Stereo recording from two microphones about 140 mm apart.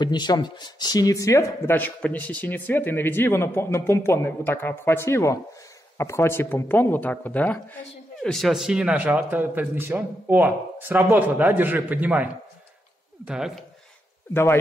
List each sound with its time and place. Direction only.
0.0 s speech: 30° left (ahead or behind); by 13.7 s 5° right (ahead or behind)
14.3 s speech: 20° left (ahead or behind)